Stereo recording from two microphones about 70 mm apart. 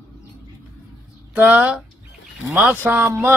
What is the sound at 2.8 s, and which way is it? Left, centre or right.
Speech, right.